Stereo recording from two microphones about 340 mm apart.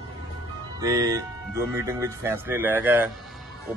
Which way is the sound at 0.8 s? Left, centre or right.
Centre.